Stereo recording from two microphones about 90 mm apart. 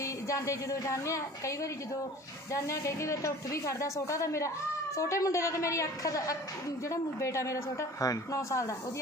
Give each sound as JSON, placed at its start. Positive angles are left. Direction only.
{"t": 0.0, "sound": "a woman's voice", "side_deg": 35}